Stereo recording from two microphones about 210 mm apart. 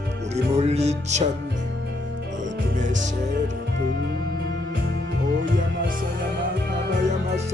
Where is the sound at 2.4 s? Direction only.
35° right (ahead or behind).